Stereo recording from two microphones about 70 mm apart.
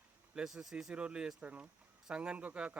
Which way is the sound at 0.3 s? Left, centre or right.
Centre.